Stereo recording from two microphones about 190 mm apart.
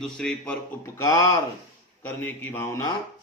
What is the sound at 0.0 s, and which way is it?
Speech, 5° left (ahead or behind).